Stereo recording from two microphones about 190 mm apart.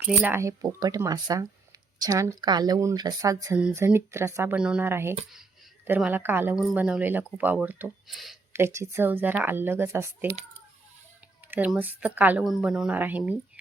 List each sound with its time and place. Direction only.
0.0 s a woman's voice: 10° right (ahead or behind)
8.5 s a woman's voice: 15° right (ahead or behind)
11.5 s a woman's voice: 10° right (ahead or behind)